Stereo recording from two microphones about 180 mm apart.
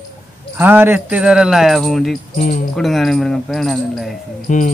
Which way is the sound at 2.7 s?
Centre (ahead or behind).